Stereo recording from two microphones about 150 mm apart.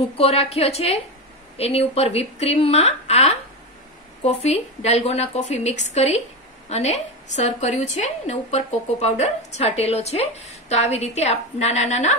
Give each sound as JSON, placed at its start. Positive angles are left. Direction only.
{"t": 0.2, "sound": "a woman's voice", "side_deg": 40}